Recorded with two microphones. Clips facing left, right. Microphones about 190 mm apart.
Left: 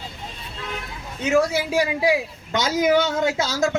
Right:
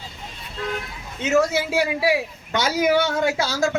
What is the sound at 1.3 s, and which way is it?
A man's voice, 15° left (ahead or behind).